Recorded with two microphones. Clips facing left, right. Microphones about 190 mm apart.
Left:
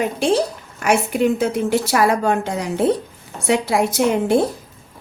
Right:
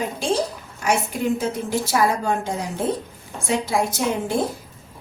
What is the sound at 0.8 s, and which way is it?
A woman's voice, 65° left (ahead or behind).